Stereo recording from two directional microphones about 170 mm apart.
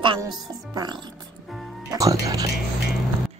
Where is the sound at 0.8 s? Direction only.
25° right (ahead or behind).